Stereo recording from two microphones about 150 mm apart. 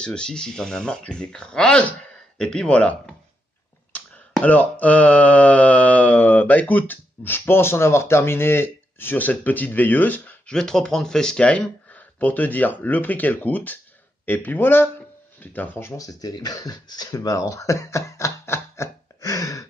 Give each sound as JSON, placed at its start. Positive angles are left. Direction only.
{"t": 0.0, "sound": "speech", "side_deg": 5}
{"t": 4.3, "sound": "a sound", "side_deg": 10}
{"t": 16.0, "sound": "speech", "side_deg": 25}